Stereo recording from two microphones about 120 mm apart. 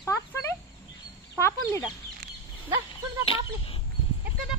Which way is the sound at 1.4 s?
25° left (ahead or behind).